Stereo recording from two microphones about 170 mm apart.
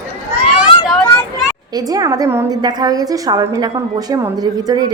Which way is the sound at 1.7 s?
20° right (ahead or behind).